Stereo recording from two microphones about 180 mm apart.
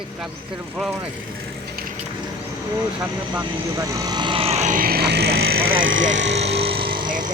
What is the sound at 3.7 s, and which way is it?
Speech, 20° right (ahead or behind).